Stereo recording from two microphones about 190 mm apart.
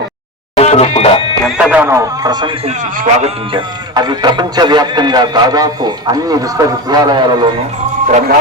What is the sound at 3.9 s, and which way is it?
Speech, 20° right (ahead or behind).